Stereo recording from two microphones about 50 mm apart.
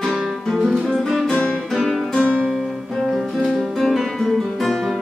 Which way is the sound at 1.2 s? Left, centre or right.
Left.